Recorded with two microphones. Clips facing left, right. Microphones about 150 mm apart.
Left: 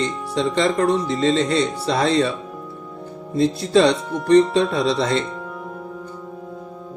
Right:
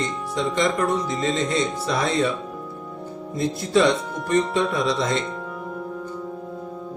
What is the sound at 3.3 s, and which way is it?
Speech, 30° left (ahead or behind).